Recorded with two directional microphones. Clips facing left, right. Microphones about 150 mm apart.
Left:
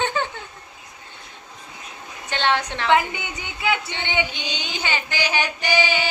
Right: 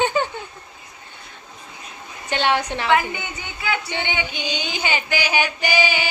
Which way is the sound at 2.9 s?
20° left (ahead or behind).